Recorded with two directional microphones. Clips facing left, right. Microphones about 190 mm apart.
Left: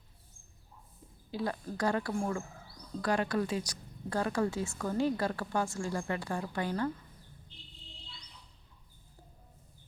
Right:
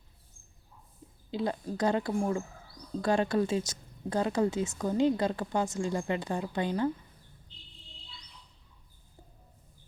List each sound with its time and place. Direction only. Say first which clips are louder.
1.3 s a woman's voice: right 3 dB; 20° right (ahead or behind)